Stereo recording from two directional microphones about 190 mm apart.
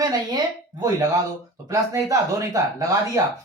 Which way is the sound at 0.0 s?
20° right (ahead or behind).